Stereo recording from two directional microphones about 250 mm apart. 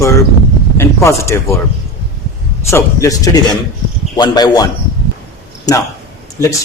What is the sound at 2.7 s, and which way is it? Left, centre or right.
Speech, centre.